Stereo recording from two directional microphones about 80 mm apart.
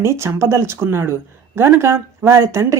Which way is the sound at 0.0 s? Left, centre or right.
Right.